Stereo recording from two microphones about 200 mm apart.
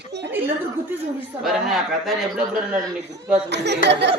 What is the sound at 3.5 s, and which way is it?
Speech, 60° right (ahead or behind).